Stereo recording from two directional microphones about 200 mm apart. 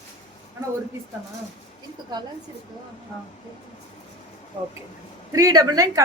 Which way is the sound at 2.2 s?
20° right (ahead or behind).